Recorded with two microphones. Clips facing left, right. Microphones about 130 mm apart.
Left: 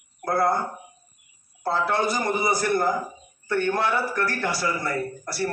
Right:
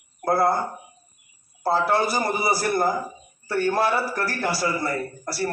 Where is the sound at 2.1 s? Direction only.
30° right (ahead or behind).